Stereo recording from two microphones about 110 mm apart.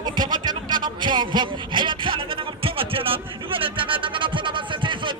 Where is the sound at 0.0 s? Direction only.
45° right (ahead or behind).